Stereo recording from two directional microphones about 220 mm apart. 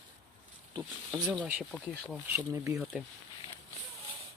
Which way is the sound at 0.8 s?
5° right (ahead or behind).